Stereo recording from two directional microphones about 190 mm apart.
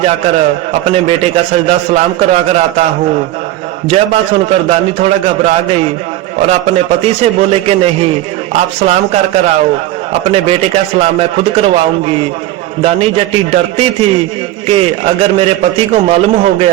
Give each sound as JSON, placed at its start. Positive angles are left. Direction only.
{"t": 0.0, "sound": "a man's voice", "side_deg": -35}
{"t": 3.8, "sound": "a man's voice", "side_deg": -30}